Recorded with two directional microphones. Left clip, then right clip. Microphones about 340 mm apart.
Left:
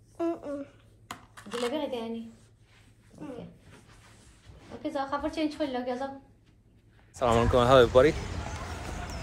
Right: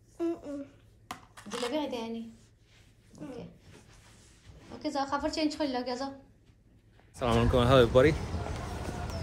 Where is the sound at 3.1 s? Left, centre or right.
Centre.